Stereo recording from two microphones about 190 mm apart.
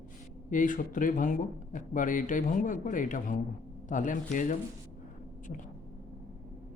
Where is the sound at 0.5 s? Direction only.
45° left (ahead or behind).